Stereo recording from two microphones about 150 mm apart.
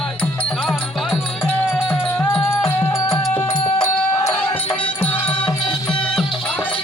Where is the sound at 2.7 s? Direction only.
15° left (ahead or behind).